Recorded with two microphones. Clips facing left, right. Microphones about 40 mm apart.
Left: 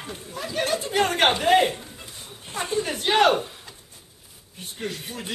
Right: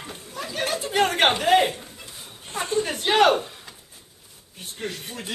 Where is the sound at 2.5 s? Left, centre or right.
Centre.